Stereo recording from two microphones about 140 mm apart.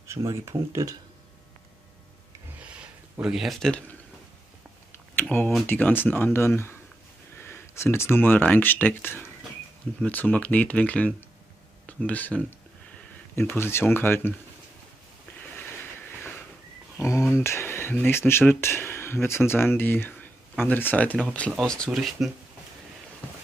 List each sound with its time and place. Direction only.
0.1 s speech: 20° right (ahead or behind)
2.6 s a sound: 10° right (ahead or behind)
4.9 s a sound: 15° left (ahead or behind)
5.7 s speech: 15° left (ahead or behind)
15.5 s train: 15° left (ahead or behind)
17.4 s speech: 20° left (ahead or behind); by 22.3 s centre (ahead or behind)